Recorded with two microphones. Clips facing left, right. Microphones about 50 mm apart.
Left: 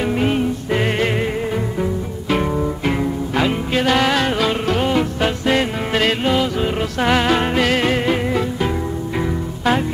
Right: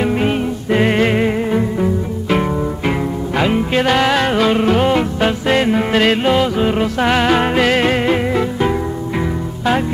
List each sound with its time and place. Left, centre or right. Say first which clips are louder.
0.0 s music: right 2 dB; centre